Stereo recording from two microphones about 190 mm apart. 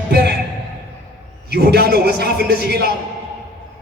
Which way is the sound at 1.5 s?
60° right (ahead or behind).